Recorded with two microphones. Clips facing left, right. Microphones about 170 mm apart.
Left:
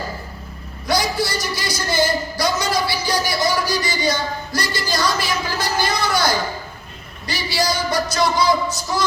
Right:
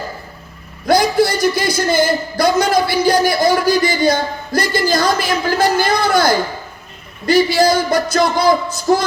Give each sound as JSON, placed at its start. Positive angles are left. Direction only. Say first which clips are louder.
{"t": 0.9, "sound": "speech", "louder": "right 8 dB", "side_deg": -55}